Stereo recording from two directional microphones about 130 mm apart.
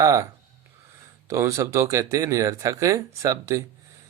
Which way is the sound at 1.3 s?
25° right (ahead or behind).